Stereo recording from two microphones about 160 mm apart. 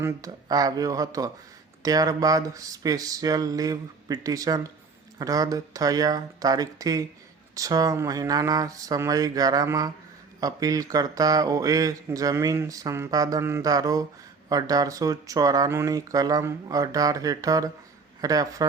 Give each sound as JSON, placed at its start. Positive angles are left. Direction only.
{"t": 0.0, "sound": "speech", "side_deg": -25}